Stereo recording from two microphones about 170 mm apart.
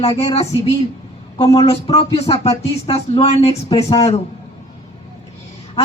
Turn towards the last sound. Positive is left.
turn(degrees=35)  # may be behind; listen again after turning